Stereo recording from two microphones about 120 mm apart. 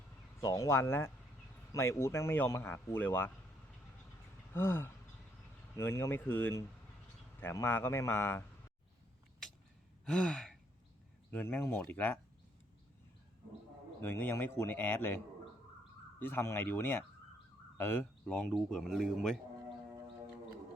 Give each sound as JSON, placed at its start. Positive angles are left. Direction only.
{"t": 0.4, "sound": "speech", "side_deg": 30}
{"t": 4.5, "sound": "speech", "side_deg": 20}
{"t": 10.1, "sound": "gasp", "side_deg": 5}
{"t": 11.3, "sound": "a man's voice", "side_deg": 15}
{"t": 14.0, "sound": "a man's voice", "side_deg": 15}
{"t": 16.2, "sound": "a man's voice", "side_deg": 20}
{"t": 18.3, "sound": "speech", "side_deg": 5}